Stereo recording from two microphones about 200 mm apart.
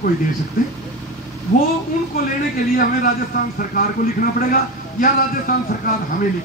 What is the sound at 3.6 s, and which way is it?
Speech, 45° left (ahead or behind).